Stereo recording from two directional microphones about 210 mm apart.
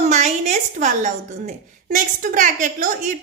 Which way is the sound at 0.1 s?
35° right (ahead or behind).